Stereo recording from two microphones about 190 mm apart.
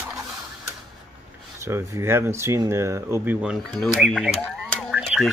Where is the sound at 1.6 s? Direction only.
15° right (ahead or behind); by 4.3 s centre (ahead or behind).